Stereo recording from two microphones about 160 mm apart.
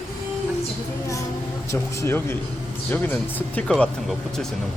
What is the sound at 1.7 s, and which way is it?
Speech, 15° left (ahead or behind).